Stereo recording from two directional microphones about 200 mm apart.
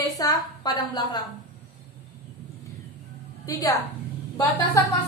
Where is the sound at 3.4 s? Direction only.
15° left (ahead or behind).